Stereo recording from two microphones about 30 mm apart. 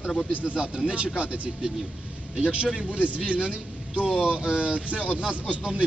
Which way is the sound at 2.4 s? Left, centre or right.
Right.